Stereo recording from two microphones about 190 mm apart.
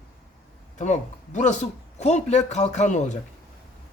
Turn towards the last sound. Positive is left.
turn(degrees=40)  # may be behind; listen again after turning